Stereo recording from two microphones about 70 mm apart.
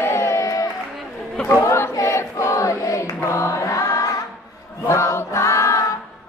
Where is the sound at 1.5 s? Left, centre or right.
Left.